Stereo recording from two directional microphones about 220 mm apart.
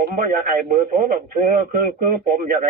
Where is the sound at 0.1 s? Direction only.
40° right (ahead or behind).